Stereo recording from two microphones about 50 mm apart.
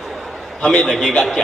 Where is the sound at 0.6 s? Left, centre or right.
Centre.